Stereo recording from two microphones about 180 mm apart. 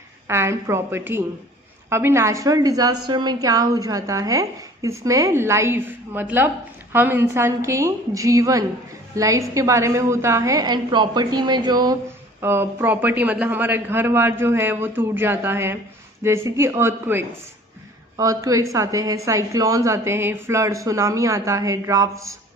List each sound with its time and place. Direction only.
0.3 s a woman's voice: 15° right (ahead or behind)